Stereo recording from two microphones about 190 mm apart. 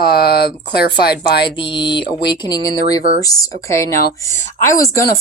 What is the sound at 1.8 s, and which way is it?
Speech, 25° left (ahead or behind).